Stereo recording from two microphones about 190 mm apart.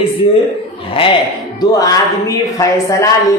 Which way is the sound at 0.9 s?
25° left (ahead or behind).